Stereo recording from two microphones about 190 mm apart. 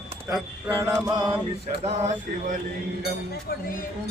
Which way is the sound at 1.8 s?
35° right (ahead or behind).